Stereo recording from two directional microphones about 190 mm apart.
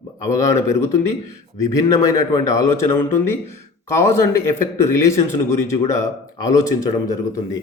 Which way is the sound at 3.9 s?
15° left (ahead or behind).